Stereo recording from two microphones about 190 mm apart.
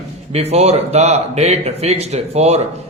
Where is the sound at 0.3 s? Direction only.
35° right (ahead or behind).